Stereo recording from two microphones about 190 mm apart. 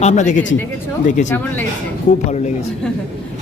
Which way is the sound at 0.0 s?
40° left (ahead or behind).